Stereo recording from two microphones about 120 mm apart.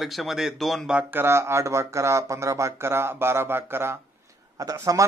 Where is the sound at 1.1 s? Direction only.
20° right (ahead or behind).